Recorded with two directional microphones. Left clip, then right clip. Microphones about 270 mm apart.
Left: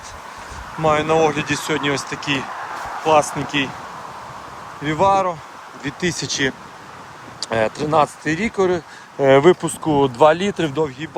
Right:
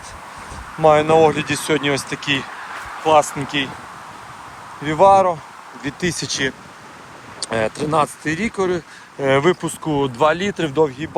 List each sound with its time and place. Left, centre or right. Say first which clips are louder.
0.8 s speech: right 4 dB; centre
4.8 s speech: right 4 dB; centre